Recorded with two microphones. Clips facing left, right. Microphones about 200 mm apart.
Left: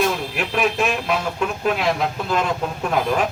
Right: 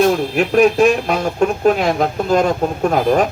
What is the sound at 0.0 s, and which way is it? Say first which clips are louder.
Speech: right 8 dB; 45° right (ahead or behind).